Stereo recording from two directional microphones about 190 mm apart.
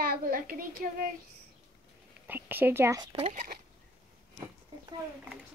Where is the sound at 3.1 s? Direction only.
30° right (ahead or behind).